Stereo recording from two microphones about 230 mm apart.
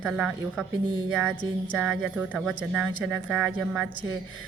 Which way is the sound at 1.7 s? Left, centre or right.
Centre.